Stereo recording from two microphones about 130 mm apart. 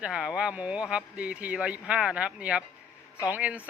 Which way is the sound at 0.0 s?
5° right (ahead or behind).